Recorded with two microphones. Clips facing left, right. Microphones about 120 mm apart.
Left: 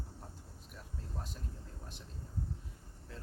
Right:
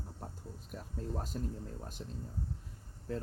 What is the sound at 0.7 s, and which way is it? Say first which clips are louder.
Speech: right 8 dB; 45° right (ahead or behind).